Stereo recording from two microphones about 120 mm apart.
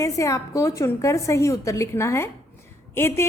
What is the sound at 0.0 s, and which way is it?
A woman's voice, 25° left (ahead or behind).